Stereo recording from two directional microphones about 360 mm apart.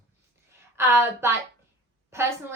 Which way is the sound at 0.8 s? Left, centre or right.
Centre.